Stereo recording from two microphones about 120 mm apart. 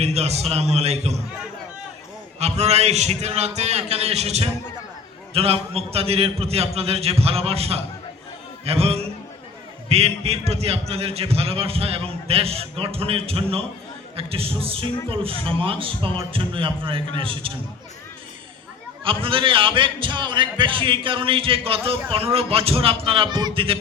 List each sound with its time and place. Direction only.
0.0 s a man's voice: 60° right (ahead or behind)
2.4 s a man's voice: 65° right (ahead or behind); by 17.5 s 45° right (ahead or behind)
19.0 s a man's voice: 50° right (ahead or behind)